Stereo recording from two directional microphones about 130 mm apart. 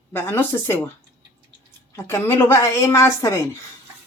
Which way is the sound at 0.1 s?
15° left (ahead or behind).